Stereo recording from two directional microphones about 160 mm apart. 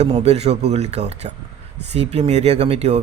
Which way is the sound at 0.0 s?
40° right (ahead or behind).